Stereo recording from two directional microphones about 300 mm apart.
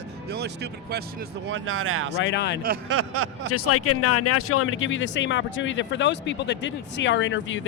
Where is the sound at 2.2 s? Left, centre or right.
Left.